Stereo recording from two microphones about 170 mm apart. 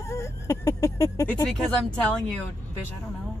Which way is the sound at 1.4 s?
5° left (ahead or behind).